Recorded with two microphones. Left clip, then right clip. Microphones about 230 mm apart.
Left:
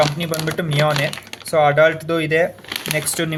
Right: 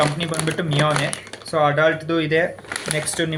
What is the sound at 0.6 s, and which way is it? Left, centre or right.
Speech, left.